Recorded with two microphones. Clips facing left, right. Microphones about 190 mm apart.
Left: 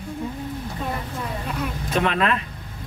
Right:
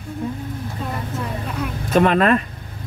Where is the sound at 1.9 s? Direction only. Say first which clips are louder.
Right 7 dB; 45° right (ahead or behind).